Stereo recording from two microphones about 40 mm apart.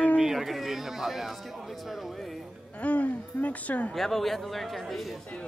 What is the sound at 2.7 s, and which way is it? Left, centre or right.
Speech, left.